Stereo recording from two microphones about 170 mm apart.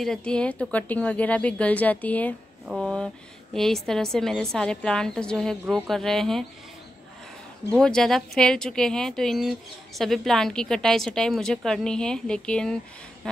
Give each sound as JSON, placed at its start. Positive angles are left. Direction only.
{"t": 0.0, "sound": "speech", "side_deg": 5}
{"t": 7.7, "sound": "speech", "side_deg": 5}